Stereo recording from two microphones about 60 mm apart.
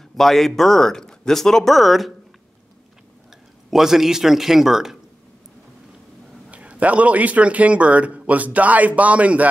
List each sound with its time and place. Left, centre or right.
0.2 s speech: centre
3.7 s speech: centre
6.5 s a man's voice: right